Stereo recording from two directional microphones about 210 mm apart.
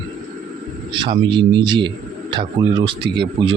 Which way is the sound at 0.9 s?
20° right (ahead or behind).